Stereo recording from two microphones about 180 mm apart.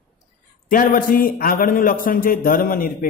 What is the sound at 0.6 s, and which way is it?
A man's voice, 50° left (ahead or behind).